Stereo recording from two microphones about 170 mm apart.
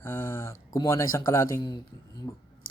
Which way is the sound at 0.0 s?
15° left (ahead or behind).